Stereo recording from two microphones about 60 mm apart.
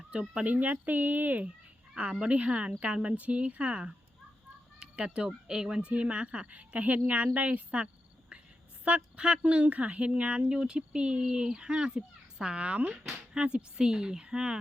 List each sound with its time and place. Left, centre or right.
0.1 s speech: centre
8.3 s a sound: right
8.8 s speech: centre